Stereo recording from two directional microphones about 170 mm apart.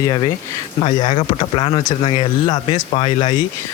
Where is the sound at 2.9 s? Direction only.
35° left (ahead or behind).